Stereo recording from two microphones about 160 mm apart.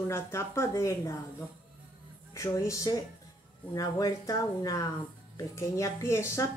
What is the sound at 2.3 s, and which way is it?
Speech, 20° left (ahead or behind).